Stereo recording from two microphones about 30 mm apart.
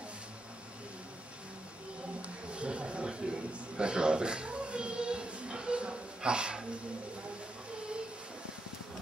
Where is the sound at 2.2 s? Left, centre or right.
Right.